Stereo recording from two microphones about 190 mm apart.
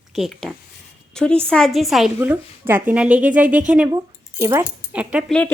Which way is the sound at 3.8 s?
20° right (ahead or behind).